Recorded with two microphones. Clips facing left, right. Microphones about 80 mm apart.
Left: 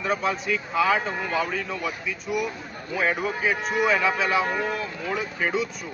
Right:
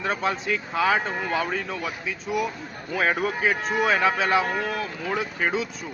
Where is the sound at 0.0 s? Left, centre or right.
Right.